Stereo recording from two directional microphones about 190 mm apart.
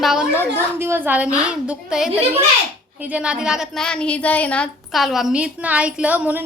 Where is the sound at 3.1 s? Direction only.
5° right (ahead or behind).